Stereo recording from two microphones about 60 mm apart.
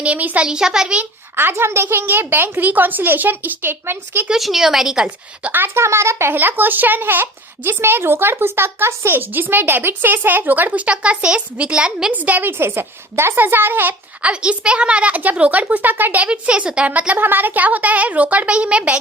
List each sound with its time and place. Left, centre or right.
0.0 s a woman's voice: right
0.4 s a woman's voice: centre
1.4 s a woman's voice: right
4.3 s a woman's voice: centre
5.0 s a woman's voice: right
5.5 s speech: right
6.3 s a woman's voice: right; by 12.1 s centre
12.1 s a woman's voice: right
12.5 s a woman's voice: right
16.3 s a woman's voice: centre
17.2 s a woman's voice: right; by 18.9 s centre